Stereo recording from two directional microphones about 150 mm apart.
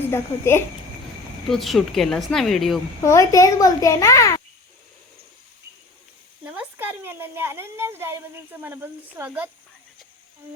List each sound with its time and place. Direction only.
0.1 s speech: 15° left (ahead or behind)
1.5 s a woman's voice: centre (ahead or behind)
3.0 s a child's voice: 20° left (ahead or behind)
6.4 s speech: 10° right (ahead or behind)